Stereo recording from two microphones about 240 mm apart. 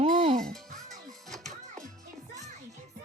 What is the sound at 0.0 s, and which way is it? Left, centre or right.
Music, right.